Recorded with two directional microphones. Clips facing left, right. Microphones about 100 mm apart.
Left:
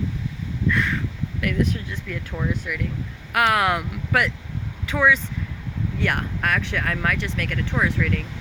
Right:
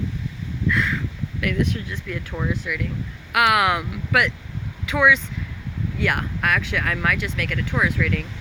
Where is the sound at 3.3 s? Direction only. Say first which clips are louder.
Right 1 dB; 40° left (ahead or behind).